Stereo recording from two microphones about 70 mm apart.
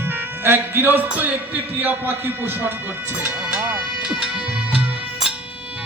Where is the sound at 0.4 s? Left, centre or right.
Right.